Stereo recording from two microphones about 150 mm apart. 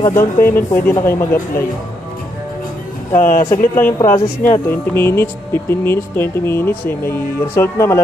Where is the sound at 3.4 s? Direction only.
15° left (ahead or behind).